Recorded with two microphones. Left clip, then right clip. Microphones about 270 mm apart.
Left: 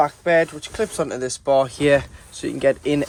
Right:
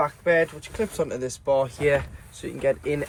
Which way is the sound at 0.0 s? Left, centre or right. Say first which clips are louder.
Left 4 dB; left.